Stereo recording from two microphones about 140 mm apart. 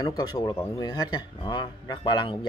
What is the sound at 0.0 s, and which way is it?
A man's voice, 25° left (ahead or behind).